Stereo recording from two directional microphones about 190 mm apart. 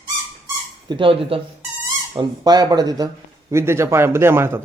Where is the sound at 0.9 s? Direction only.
25° right (ahead or behind).